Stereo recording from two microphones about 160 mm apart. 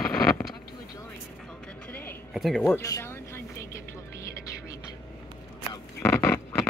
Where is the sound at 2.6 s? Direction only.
15° left (ahead or behind).